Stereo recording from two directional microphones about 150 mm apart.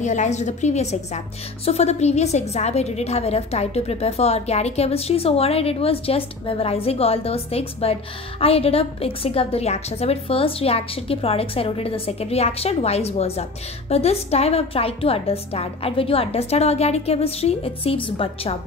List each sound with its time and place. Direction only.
0.0 s a woman's voice: 50° left (ahead or behind)